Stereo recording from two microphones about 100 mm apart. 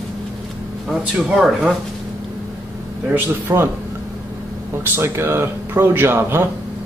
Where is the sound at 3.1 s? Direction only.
20° right (ahead or behind).